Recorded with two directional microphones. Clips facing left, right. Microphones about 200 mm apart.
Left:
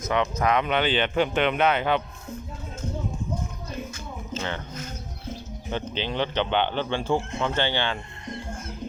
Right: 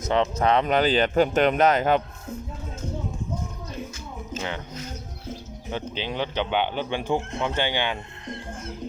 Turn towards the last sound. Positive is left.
turn(degrees=-15)  # may be behind; listen again after turning